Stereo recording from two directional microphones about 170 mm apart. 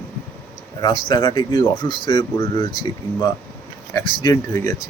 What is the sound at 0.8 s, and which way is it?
Speech, 25° left (ahead or behind).